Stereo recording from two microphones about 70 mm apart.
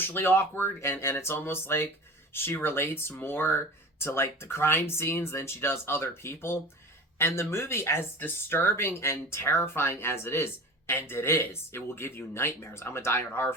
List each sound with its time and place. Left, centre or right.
0.0 s speech: left